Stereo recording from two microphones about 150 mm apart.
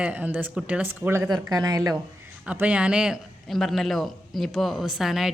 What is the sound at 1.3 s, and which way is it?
Speech, 25° right (ahead or behind).